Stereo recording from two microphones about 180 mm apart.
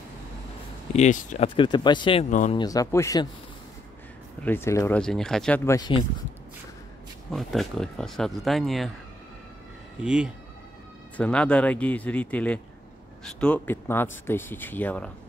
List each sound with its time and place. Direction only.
0.9 s speech: 40° left (ahead or behind)
1.6 s speech: 25° left (ahead or behind)
2.2 s speech: 45° left (ahead or behind)
2.5 s speech: 20° left (ahead or behind)
4.4 s speech: 10° left (ahead or behind)
5.7 s speech: 25° left (ahead or behind)
7.2 s speech: centre (ahead or behind)
9.9 s speech: 5° right (ahead or behind)
11.1 s speech: 5° left (ahead or behind)